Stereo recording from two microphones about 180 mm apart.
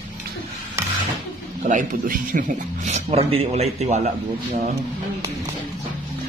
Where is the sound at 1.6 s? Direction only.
45° right (ahead or behind).